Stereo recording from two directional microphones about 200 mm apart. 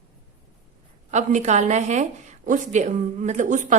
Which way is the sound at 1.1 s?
35° right (ahead or behind).